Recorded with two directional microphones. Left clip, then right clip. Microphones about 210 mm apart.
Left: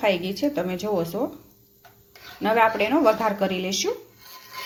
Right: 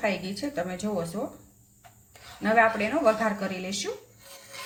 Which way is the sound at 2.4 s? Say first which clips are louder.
Left 2 dB; 30° left (ahead or behind).